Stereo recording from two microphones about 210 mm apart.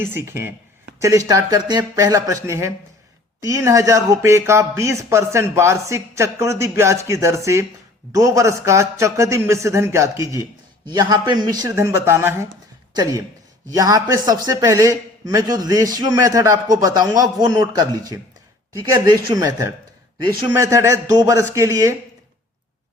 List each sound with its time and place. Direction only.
0.0 s speech: 10° right (ahead or behind)